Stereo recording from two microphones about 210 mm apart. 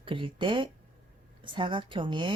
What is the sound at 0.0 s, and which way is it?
Speech, 25° right (ahead or behind).